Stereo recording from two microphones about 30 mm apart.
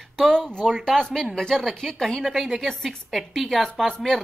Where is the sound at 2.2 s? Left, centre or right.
Centre.